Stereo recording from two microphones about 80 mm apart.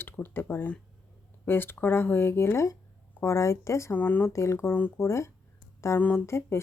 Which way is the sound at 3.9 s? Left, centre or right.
Left.